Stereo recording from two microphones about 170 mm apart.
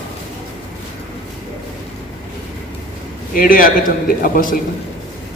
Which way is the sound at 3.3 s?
55° left (ahead or behind).